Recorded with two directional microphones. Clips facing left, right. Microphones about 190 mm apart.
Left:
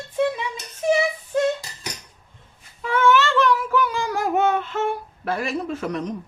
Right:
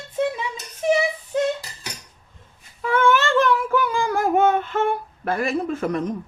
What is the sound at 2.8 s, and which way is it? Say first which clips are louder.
Child singing: even; 50° right (ahead or behind).